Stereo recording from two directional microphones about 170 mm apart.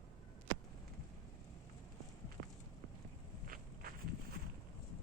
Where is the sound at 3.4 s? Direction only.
60° right (ahead or behind).